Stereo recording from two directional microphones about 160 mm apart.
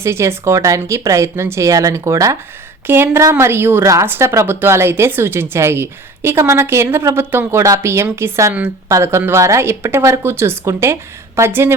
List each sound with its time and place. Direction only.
0.0 s a woman's voice: 15° right (ahead or behind)